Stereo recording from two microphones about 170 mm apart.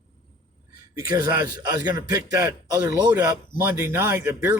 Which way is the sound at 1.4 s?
25° right (ahead or behind).